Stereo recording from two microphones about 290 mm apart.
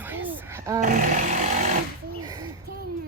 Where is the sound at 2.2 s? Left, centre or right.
Centre.